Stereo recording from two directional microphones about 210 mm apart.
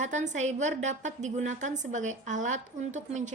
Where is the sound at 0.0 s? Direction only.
35° right (ahead or behind).